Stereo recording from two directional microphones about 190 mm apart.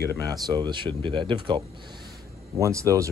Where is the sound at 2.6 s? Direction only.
15° right (ahead or behind).